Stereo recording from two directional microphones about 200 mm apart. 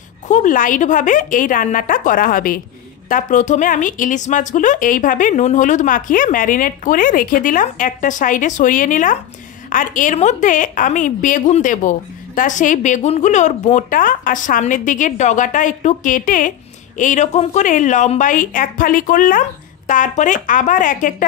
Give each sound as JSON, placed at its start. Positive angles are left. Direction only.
{"t": 0.3, "sound": "a woman's voice", "side_deg": 40}